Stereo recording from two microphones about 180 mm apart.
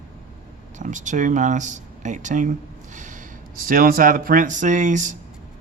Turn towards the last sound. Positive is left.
turn(degrees=-45)  # may be behind; listen again after turning